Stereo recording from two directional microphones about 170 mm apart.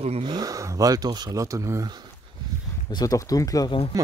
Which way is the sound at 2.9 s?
20° left (ahead or behind).